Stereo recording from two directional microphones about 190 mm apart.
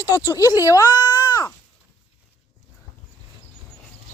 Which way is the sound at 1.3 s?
20° left (ahead or behind).